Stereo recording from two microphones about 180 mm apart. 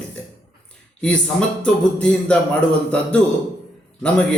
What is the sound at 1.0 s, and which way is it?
A man's voice, 5° left (ahead or behind).